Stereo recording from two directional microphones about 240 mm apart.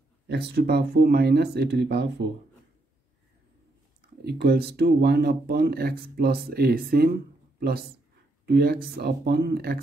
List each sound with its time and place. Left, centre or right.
0.3 s speech: right
4.2 s speech: right
8.5 s speech: right